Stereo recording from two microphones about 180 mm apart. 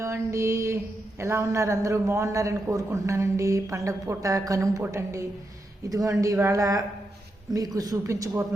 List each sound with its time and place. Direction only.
0.0 s mantra: 15° right (ahead or behind)
1.2 s a man's voice: 15° right (ahead or behind)